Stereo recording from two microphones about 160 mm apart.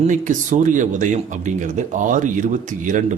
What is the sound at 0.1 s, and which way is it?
Speech, 55° right (ahead or behind).